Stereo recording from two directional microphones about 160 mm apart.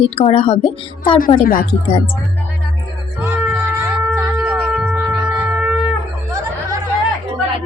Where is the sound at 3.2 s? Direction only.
15° right (ahead or behind).